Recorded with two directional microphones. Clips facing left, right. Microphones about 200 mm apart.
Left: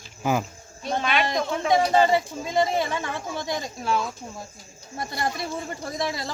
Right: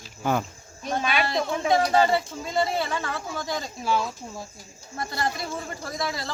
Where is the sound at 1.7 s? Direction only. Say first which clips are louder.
Left 2 dB; 20° left (ahead or behind).